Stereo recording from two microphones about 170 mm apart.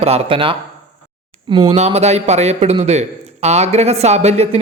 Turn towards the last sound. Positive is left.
turn(degrees=-40)  # may be behind; listen again after turning